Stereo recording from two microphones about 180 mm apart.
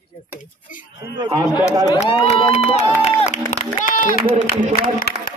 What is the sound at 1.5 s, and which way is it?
Speech, 20° left (ahead or behind).